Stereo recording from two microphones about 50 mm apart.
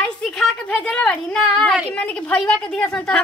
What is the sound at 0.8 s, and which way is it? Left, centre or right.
A woman's voice, centre.